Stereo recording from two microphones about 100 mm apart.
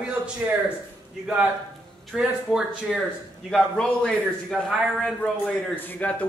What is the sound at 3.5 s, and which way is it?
A man's voice, 5° left (ahead or behind).